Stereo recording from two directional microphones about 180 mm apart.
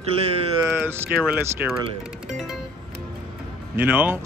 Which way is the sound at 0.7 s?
10° right (ahead or behind).